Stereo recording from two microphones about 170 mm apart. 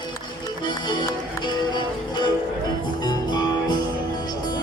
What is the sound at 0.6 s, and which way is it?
Music, 25° left (ahead or behind).